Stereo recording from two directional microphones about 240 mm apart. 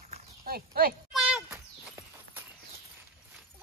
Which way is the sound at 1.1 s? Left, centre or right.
Centre.